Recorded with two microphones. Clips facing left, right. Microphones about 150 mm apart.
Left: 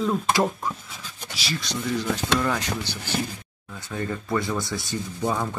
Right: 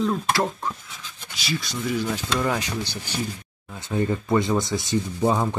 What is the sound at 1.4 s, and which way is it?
Speech, centre (ahead or behind).